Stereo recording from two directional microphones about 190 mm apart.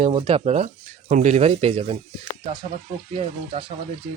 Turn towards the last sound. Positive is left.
turn(degrees=-30)  # may be behind; listen again after turning